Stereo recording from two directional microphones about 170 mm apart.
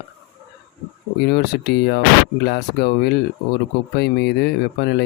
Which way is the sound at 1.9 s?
75° left (ahead or behind).